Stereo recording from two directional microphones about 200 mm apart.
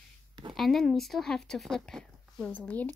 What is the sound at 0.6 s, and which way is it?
Speech, centre (ahead or behind).